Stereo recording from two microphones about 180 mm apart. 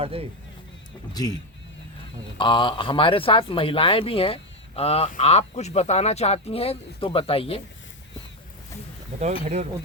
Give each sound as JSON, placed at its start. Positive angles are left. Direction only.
{"t": 0.0, "sound": "speech", "side_deg": -35}
{"t": 1.1, "sound": "speech", "side_deg": 20}
{"t": 2.4, "sound": "speech", "side_deg": 25}
{"t": 9.2, "sound": "speech", "side_deg": -40}